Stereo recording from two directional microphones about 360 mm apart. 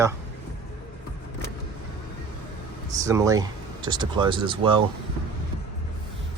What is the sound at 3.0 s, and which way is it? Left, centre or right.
Speech, centre.